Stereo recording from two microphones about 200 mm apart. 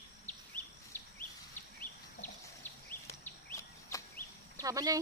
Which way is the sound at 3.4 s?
15° left (ahead or behind).